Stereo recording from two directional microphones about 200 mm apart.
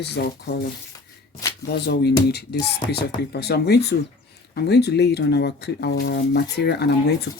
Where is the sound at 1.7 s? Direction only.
55° left (ahead or behind).